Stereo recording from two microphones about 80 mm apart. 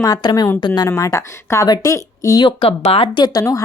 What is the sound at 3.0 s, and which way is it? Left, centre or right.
Speech, left.